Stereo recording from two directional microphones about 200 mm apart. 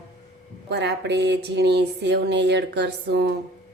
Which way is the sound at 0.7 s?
60° right (ahead or behind).